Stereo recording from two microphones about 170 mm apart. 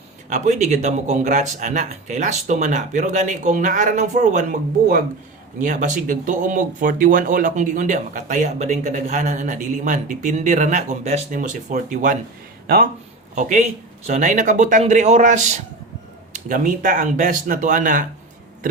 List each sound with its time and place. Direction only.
0.3 s speech: 45° right (ahead or behind)
5.6 s speech: 50° right (ahead or behind)
12.6 s speech: 60° right (ahead or behind)
13.3 s speech: 45° right (ahead or behind)